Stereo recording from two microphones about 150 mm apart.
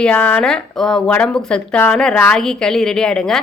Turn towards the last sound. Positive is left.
turn(degrees=5)  # may be behind; listen again after turning